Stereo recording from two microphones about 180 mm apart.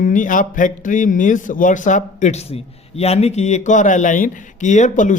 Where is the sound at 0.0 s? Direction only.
45° left (ahead or behind).